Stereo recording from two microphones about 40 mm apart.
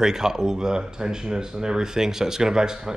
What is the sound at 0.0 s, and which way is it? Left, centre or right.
Speech, centre.